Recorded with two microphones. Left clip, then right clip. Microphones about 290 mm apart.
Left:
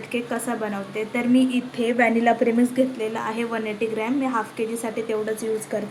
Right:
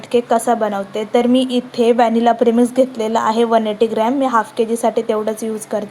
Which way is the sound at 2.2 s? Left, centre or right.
Right.